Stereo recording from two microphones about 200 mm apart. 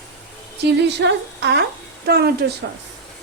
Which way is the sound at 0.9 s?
60° right (ahead or behind).